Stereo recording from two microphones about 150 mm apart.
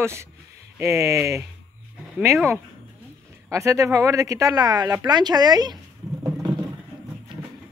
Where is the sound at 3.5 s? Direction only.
20° right (ahead or behind).